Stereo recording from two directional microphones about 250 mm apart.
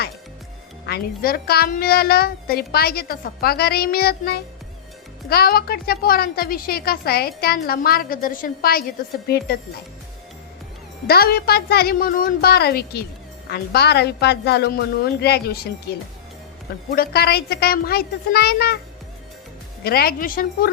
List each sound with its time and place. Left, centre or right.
0.9 s a woman's voice: left
11.0 s a woman's voice: left
19.8 s a woman's voice: left